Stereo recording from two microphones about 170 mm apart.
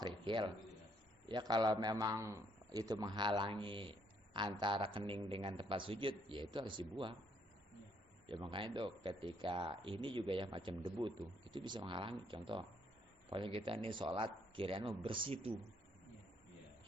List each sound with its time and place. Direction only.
0.0 s a sound: 30° right (ahead or behind)
1.3 s speech: 25° right (ahead or behind)
8.3 s speech: 30° right (ahead or behind)